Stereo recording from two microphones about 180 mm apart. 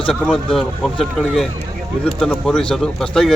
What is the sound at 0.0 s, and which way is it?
Speech, 5° left (ahead or behind).